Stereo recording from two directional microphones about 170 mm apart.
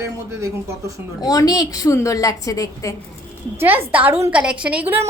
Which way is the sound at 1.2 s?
20° left (ahead or behind).